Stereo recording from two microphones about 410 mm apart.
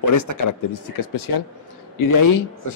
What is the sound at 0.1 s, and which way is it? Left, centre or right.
Speech, left.